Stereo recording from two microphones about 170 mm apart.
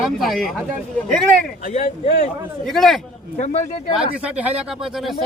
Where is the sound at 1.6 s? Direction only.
40° left (ahead or behind).